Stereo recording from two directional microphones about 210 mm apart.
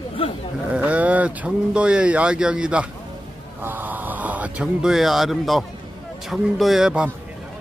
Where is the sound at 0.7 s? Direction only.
5° right (ahead or behind).